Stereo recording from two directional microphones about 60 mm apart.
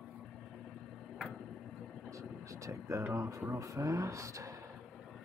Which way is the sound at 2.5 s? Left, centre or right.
Right.